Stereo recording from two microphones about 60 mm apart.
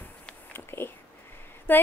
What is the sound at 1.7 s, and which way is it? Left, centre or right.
Speech, left.